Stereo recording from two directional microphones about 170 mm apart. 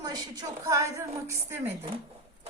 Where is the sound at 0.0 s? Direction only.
25° right (ahead or behind).